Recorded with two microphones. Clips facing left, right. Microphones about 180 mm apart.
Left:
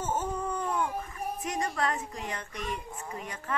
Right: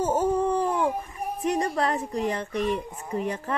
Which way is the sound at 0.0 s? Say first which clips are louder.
Right 9 dB; 35° right (ahead or behind).